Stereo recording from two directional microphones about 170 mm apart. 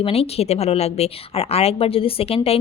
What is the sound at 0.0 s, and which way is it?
Speech, 35° left (ahead or behind).